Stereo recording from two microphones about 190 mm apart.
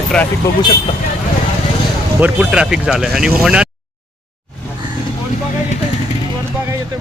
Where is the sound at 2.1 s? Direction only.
5° right (ahead or behind).